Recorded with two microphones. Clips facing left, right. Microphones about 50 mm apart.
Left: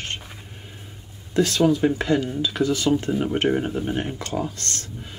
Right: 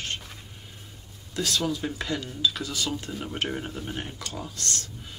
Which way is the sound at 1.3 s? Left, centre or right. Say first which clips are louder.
Left 9 dB; left.